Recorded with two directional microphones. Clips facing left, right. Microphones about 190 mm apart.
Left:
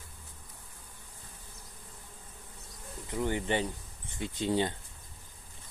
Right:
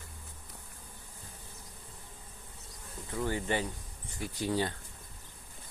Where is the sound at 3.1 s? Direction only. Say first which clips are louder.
Left 2 dB; 20° left (ahead or behind).